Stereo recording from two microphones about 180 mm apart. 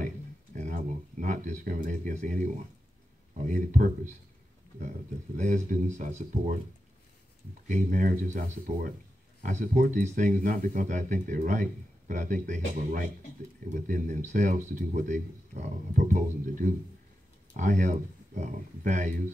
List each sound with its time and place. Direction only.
1.2 s speech: 45° right (ahead or behind)
7.6 s speech: 45° right (ahead or behind)